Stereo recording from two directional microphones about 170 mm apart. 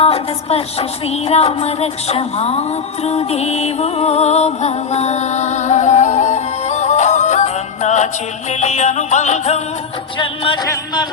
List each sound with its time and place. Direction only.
0.0 s music: 35° left (ahead or behind)
10.2 s music: 30° left (ahead or behind)